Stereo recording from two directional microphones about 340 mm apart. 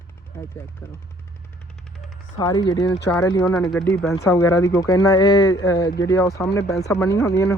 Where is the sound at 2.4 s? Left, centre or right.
Centre.